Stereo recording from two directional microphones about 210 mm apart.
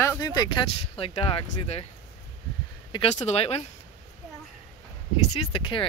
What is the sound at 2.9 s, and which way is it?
Speech, 30° left (ahead or behind).